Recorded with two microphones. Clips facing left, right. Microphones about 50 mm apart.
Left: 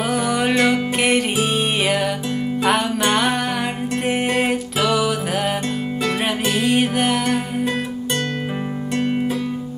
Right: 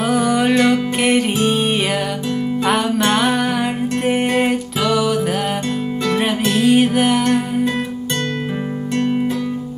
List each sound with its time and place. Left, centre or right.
0.0 s music: centre